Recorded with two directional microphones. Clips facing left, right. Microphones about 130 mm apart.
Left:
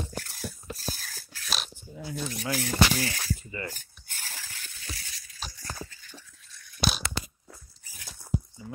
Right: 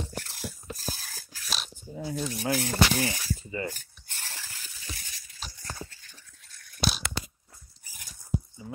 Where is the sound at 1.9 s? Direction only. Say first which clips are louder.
Right 3 dB; 30° right (ahead or behind).